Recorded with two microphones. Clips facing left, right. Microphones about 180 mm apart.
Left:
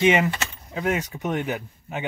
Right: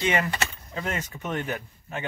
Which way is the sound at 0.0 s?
20° left (ahead or behind).